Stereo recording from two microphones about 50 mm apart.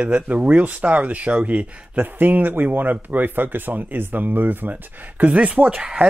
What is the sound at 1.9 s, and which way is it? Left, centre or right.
Speech, right.